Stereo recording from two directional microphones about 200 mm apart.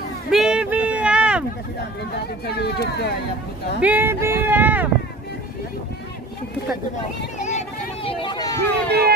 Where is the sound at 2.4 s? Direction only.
55° left (ahead or behind).